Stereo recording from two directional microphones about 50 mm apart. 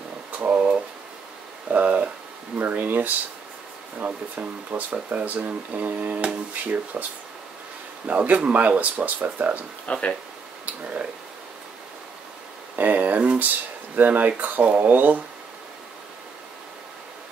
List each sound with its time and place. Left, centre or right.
0.3 s a sound: right
2.5 s speech: right
8.1 s speech: right
9.8 s speech: left
10.6 s speech: right
12.7 s a sound: right
13.9 s speech: right
14.6 s speech: centre
14.9 s speech: right